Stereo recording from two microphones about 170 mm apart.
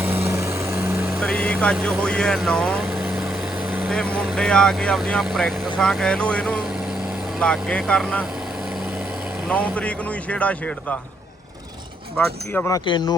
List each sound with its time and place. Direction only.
0.0 s vehicle: 15° right (ahead or behind)
1.2 s speech: 5° left (ahead or behind)
9.5 s speech: 5° left (ahead or behind)
12.1 s speech: 10° left (ahead or behind)
12.7 s speech: 25° left (ahead or behind)